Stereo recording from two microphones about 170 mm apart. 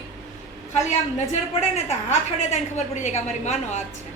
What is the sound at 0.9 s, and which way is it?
A woman's voice, 40° left (ahead or behind).